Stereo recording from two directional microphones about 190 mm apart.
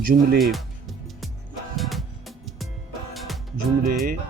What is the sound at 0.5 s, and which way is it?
Music, centre (ahead or behind).